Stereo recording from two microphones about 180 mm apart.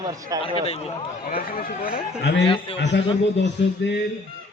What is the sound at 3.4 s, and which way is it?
Music, 75° left (ahead or behind).